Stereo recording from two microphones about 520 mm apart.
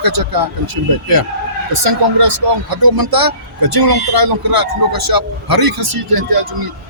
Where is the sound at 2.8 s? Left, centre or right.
Right.